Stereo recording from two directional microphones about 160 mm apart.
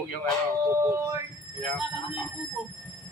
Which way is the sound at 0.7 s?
20° right (ahead or behind).